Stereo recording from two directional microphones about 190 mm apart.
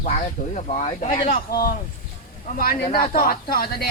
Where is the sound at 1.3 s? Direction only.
50° left (ahead or behind).